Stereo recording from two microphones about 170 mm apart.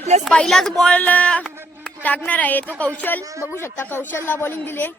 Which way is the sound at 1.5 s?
15° right (ahead or behind).